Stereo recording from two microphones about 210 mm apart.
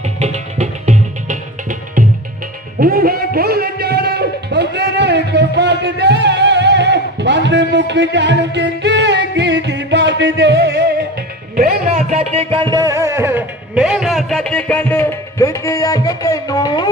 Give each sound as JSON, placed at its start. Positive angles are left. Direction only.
{"t": 0.2, "sound": "music", "side_deg": -35}
{"t": 2.7, "sound": "music", "side_deg": -45}
{"t": 11.5, "sound": "a man's voice", "side_deg": -45}
{"t": 11.9, "sound": "music", "side_deg": -30}